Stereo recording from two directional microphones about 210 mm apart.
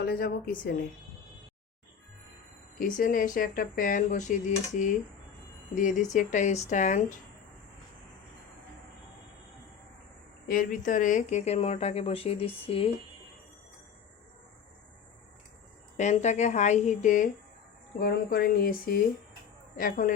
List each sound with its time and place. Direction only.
0.0 s speech: 45° left (ahead or behind)
2.7 s speech: 40° left (ahead or behind)
10.5 s speech: 40° left (ahead or behind)
16.0 s speech: 35° left (ahead or behind)